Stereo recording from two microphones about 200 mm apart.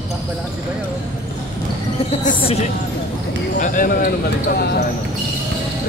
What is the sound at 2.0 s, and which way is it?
Speech, 30° left (ahead or behind).